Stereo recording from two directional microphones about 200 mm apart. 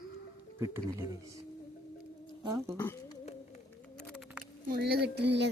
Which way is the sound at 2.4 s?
15° right (ahead or behind).